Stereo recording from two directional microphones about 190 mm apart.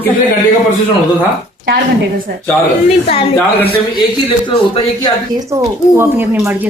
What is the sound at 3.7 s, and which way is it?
Speech, 25° left (ahead or behind).